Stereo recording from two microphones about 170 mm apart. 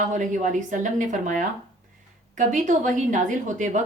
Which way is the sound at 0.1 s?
45° right (ahead or behind).